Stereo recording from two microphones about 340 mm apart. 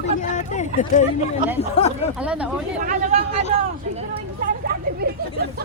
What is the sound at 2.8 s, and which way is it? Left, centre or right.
Speech, right.